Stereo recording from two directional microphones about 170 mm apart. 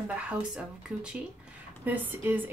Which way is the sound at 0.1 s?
5° right (ahead or behind).